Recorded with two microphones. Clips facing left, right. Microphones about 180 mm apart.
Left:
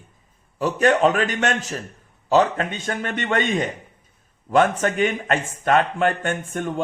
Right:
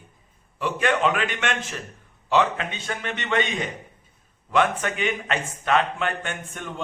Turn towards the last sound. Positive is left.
turn(degrees=45)  # may be behind; listen again after turning